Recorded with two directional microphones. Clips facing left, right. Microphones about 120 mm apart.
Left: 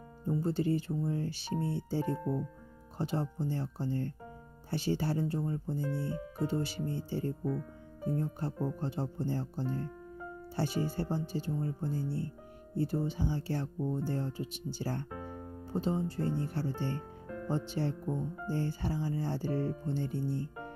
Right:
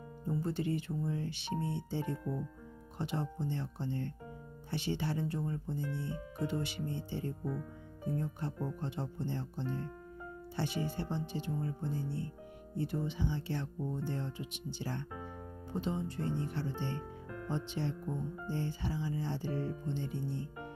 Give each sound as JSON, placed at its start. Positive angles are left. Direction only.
{"t": 0.3, "sound": "speech", "side_deg": 30}